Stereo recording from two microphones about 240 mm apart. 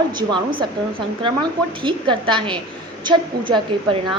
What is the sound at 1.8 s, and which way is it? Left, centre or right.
A woman's voice, centre.